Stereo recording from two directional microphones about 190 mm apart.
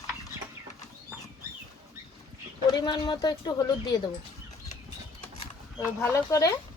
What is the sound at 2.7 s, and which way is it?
Speech, 20° left (ahead or behind).